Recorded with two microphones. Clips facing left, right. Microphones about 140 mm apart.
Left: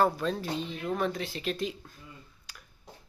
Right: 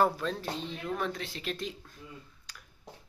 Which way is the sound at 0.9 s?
5° left (ahead or behind).